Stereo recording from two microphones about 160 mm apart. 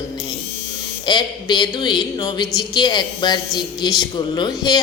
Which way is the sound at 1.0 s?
30° left (ahead or behind).